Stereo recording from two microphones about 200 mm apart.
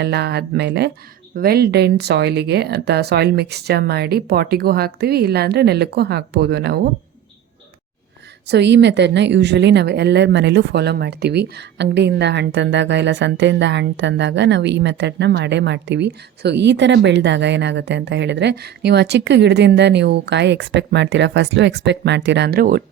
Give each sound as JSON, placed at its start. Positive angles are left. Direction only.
{"t": 0.0, "sound": "a woman's voice", "side_deg": -55}
{"t": 8.4, "sound": "a woman's voice", "side_deg": -60}